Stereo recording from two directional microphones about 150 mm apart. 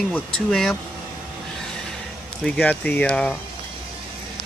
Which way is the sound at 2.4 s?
10° left (ahead or behind).